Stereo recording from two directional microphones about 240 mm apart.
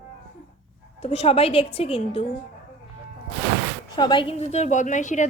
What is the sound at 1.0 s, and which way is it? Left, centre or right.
A woman's voice, left.